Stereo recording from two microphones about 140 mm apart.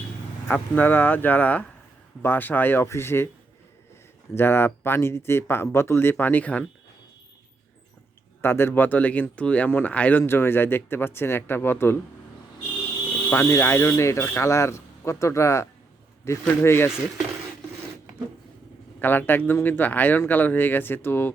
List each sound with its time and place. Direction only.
0.4 s speech: 10° left (ahead or behind)
4.4 s speech: 15° left (ahead or behind)
8.4 s speech: 15° left (ahead or behind)
13.3 s speech: 20° left (ahead or behind)
18.9 s speech: 15° left (ahead or behind)